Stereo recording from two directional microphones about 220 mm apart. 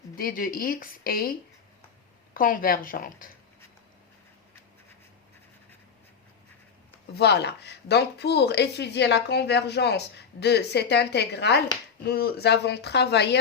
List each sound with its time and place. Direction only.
0.2 s speech: 40° left (ahead or behind)
7.1 s speech: 50° left (ahead or behind)